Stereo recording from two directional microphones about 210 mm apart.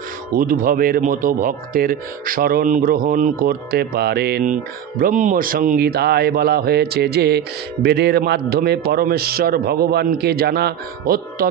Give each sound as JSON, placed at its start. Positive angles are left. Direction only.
{"t": 0.4, "sound": "speech", "side_deg": -40}